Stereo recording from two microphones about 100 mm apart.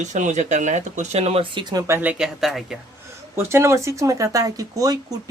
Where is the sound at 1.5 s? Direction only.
45° right (ahead or behind).